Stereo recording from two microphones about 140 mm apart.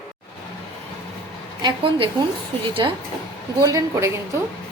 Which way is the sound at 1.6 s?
35° right (ahead or behind).